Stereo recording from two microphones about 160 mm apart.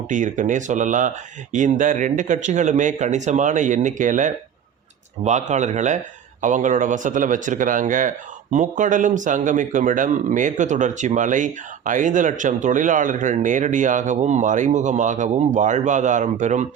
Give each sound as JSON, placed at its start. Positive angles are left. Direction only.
{"t": 0.1, "sound": "speech", "side_deg": -50}